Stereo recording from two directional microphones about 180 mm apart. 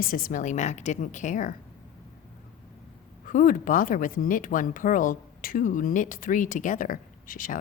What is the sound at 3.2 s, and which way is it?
Speech, 50° left (ahead or behind).